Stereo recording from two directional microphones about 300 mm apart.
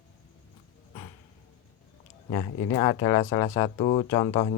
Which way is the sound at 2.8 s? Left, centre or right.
Centre.